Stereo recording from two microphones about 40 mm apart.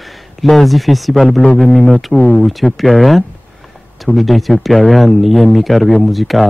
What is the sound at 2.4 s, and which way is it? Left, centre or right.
Speech, centre.